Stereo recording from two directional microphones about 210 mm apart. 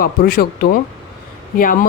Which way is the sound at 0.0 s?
45° left (ahead or behind).